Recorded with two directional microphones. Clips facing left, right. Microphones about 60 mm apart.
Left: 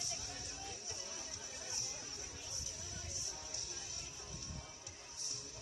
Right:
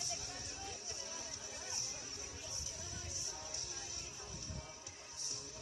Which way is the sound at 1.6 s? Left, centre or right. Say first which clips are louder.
Even; right.